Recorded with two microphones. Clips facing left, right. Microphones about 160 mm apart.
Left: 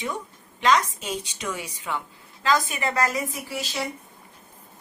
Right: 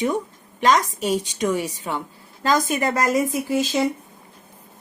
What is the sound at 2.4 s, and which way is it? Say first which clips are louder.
Speech: right 4 dB; 45° right (ahead or behind).